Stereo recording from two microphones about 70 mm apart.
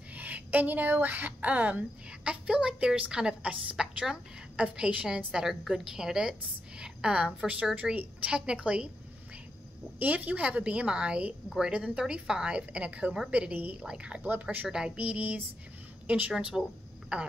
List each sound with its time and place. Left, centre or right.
0.1 s speech: right
9.9 s a woman's voice: right
11.4 s a woman's voice: centre
11.7 s speech: centre
14.2 s a woman's voice: right